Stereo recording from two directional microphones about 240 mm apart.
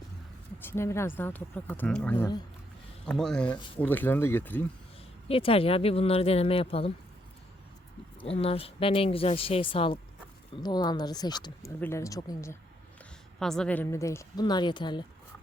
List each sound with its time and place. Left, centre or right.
0.6 s speech: centre
5.3 s speech: left
8.3 s speech: left
13.4 s speech: centre